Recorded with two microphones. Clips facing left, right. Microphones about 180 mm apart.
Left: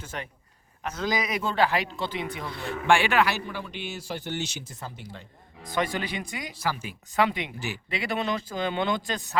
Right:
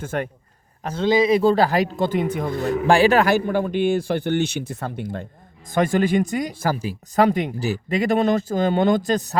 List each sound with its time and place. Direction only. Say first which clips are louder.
0.0 s speech: right 11 dB; 50° right (ahead or behind)
0.8 s speech: right 10 dB; 30° right (ahead or behind)